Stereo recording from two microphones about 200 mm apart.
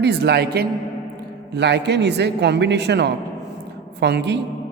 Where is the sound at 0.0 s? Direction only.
55° right (ahead or behind).